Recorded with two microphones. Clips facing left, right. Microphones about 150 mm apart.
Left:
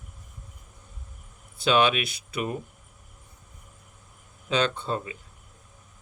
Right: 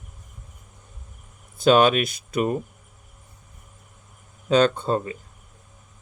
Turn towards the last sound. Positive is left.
turn(degrees=-45)  # may be behind; listen again after turning